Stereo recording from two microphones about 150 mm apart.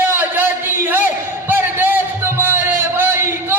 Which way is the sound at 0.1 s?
15° right (ahead or behind).